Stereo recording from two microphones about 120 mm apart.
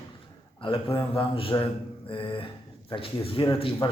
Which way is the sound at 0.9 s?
45° left (ahead or behind).